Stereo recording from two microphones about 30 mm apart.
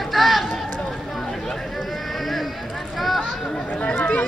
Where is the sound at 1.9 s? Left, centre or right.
Centre.